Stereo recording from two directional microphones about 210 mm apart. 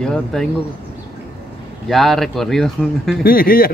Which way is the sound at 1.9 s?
Centre (ahead or behind).